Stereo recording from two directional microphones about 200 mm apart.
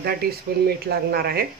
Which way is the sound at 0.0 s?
50° right (ahead or behind).